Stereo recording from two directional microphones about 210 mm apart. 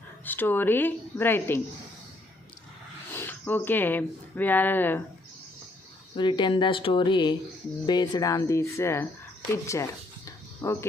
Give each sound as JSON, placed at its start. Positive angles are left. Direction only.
{"t": 0.3, "sound": "speech", "side_deg": 10}
{"t": 3.1, "sound": "speech", "side_deg": 10}
{"t": 6.1, "sound": "speech", "side_deg": 20}
{"t": 9.6, "sound": "a sound", "side_deg": 15}